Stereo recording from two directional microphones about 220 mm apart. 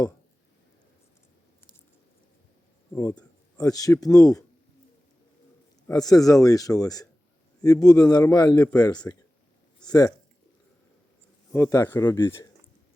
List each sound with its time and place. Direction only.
2.9 s speech: 15° left (ahead or behind)
5.9 s speech: 15° left (ahead or behind)
11.5 s speech: 10° left (ahead or behind)